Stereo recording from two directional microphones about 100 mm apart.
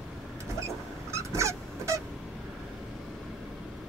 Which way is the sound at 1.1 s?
30° right (ahead or behind).